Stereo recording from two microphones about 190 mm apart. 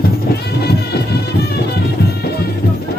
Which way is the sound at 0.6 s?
55° left (ahead or behind).